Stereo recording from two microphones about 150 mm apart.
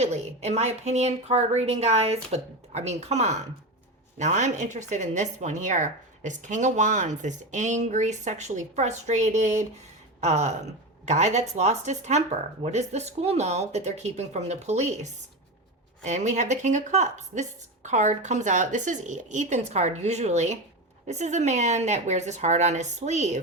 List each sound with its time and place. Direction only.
0.0 s speech: 50° right (ahead or behind)